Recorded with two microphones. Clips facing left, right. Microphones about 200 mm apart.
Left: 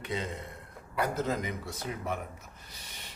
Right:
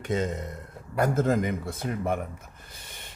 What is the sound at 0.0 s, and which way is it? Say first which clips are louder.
A man's voice: right 7 dB; 45° right (ahead or behind).